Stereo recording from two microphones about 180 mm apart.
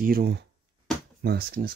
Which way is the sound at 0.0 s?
55° right (ahead or behind).